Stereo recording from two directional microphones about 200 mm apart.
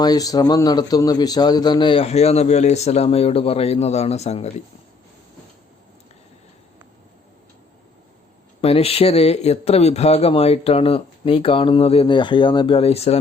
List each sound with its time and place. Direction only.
0.0 s a man's voice: 20° left (ahead or behind)
8.6 s a man's voice: 30° left (ahead or behind)